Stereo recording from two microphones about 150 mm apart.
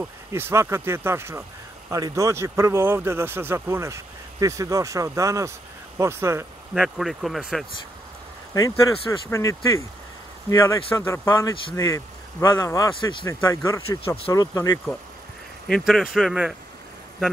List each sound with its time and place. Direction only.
0.0 s speech: 15° right (ahead or behind)
6.7 s speech: centre (ahead or behind)
8.5 s speech: 25° left (ahead or behind)
15.7 s speech: centre (ahead or behind)